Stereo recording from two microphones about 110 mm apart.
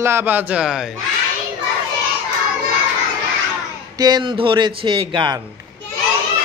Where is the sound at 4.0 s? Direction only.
45° right (ahead or behind).